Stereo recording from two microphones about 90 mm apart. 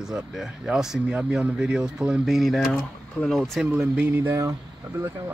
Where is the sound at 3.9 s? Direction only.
25° right (ahead or behind).